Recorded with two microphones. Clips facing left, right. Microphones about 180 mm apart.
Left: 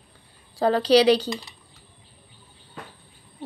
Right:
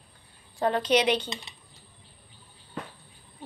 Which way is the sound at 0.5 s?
35° left (ahead or behind).